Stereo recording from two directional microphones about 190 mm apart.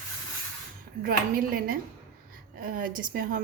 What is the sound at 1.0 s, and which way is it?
Speech, 50° right (ahead or behind).